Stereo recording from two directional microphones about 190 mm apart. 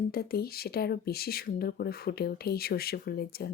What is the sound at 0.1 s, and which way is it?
Speech, 55° left (ahead or behind).